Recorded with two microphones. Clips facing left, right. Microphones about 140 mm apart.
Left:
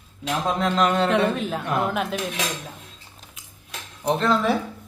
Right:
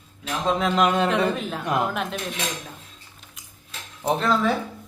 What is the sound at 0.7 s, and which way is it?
Speech, 15° right (ahead or behind).